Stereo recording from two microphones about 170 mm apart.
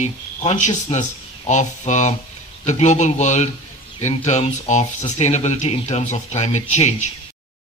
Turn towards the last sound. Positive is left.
turn(degrees=45)  # may be behind; listen again after turning